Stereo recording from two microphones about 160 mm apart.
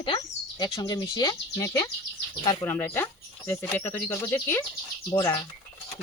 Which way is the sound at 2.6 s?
15° left (ahead or behind).